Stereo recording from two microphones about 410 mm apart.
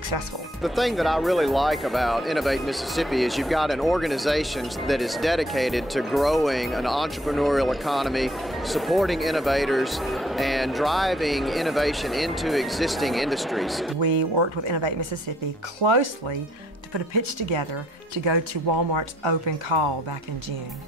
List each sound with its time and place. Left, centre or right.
0.6 s speech: centre
13.9 s speech: right